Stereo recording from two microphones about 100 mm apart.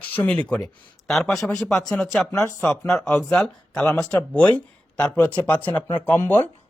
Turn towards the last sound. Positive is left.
turn(degrees=20)  # may be behind; listen again after turning